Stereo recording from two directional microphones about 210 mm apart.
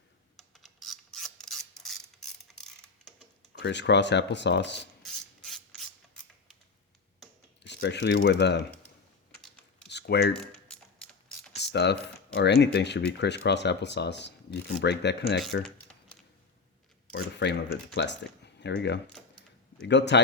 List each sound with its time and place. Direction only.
0.3 s mechanisms: centre (ahead or behind)
3.6 s speech: 55° left (ahead or behind)
5.0 s rub: centre (ahead or behind)
7.6 s speech: 55° left (ahead or behind)
9.9 s typing: 50° left (ahead or behind)
10.5 s a sound: 5° left (ahead or behind)
11.5 s speech: 55° left (ahead or behind)
15.6 s a sound: 5° left (ahead or behind)
17.1 s a sound: 45° left (ahead or behind)
17.9 s speech: 55° left (ahead or behind)